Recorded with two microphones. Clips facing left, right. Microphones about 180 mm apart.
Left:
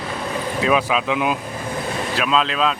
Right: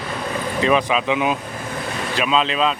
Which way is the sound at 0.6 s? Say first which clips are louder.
Right 1 dB; centre (ahead or behind).